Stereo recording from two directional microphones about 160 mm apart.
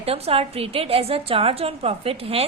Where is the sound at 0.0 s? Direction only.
35° right (ahead or behind).